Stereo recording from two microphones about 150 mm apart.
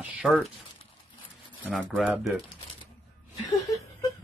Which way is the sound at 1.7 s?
Centre (ahead or behind).